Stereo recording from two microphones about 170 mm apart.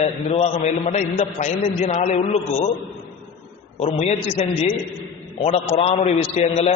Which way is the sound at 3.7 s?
40° left (ahead or behind).